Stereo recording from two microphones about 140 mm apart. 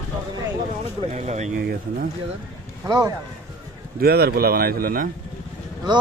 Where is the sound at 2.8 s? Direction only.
25° right (ahead or behind).